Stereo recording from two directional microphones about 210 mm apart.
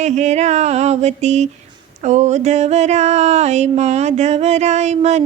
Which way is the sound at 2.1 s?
35° right (ahead or behind).